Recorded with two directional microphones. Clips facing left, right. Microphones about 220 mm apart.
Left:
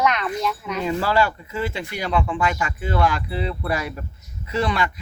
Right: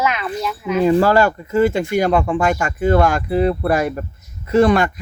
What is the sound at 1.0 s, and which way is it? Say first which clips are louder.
Speech: right 7 dB; 45° right (ahead or behind).